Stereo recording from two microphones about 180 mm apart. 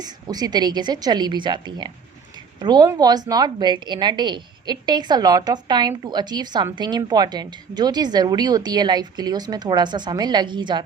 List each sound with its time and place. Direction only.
0.0 s a woman's voice: 20° right (ahead or behind)